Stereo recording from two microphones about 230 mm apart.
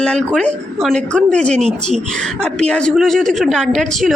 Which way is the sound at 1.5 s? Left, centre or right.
Right.